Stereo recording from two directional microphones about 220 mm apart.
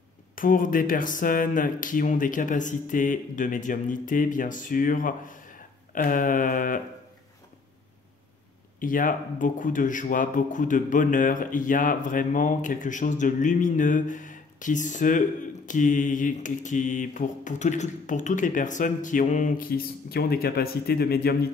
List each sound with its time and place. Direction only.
0.4 s a man's voice: 40° left (ahead or behind)
8.7 s a man's voice: 40° left (ahead or behind)